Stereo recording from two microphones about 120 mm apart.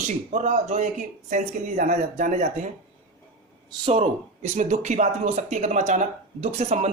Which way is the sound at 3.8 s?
55° right (ahead or behind).